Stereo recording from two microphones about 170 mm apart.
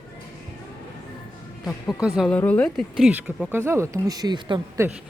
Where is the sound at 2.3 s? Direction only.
10° left (ahead or behind).